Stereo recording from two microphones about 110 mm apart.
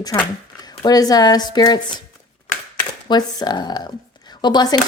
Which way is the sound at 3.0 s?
40° left (ahead or behind).